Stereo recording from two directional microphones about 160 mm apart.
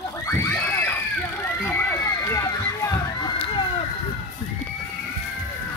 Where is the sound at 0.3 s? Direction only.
15° left (ahead or behind).